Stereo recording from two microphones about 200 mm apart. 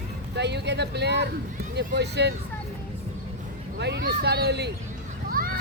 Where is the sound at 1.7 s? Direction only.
55° right (ahead or behind).